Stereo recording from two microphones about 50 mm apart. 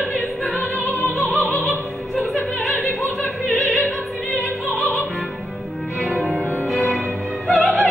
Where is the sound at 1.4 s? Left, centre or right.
Left.